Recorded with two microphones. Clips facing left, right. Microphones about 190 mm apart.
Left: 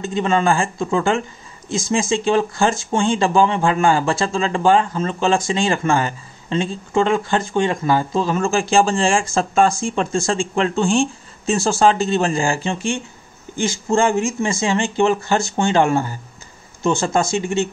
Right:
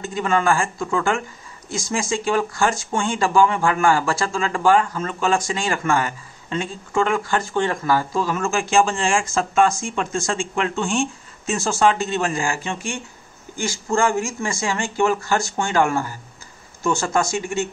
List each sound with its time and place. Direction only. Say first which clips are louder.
0.0 s speech: left 3 dB; 25° left (ahead or behind)